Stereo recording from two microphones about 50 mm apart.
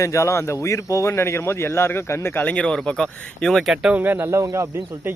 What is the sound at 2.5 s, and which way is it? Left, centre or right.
Speech, centre.